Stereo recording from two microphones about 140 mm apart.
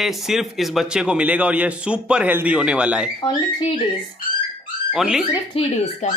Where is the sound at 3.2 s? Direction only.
30° left (ahead or behind).